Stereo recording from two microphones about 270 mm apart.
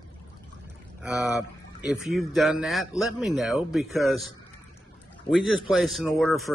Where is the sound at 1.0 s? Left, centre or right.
Centre.